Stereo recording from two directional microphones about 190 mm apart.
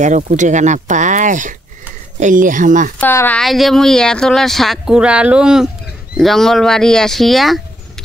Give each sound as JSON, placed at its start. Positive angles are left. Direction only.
{"t": 0.0, "sound": "speech", "side_deg": -40}
{"t": 3.0, "sound": "speech", "side_deg": 10}